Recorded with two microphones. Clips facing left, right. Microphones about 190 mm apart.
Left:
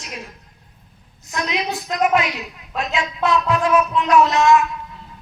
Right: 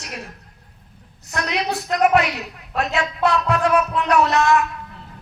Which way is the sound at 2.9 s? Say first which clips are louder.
Left 1 dB; 60° right (ahead or behind).